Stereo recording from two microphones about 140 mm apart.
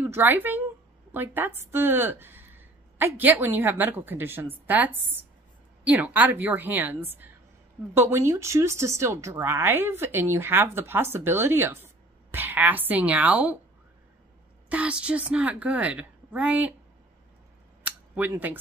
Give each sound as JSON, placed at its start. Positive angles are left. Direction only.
{"t": 0.0, "sound": "speech", "side_deg": -15}
{"t": 14.7, "sound": "speech", "side_deg": -10}
{"t": 17.8, "sound": "a sound", "side_deg": -10}